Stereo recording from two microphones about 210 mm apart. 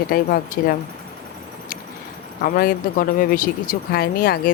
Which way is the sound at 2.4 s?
45° left (ahead or behind).